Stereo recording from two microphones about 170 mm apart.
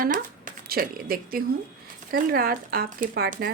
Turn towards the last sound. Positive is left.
turn(degrees=-60)  # may be behind; listen again after turning